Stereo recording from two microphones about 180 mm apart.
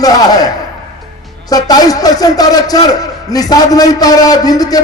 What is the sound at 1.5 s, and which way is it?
A man's voice, 20° left (ahead or behind).